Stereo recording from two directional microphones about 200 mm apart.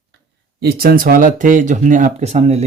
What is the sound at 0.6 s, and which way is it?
Speech, 50° right (ahead or behind).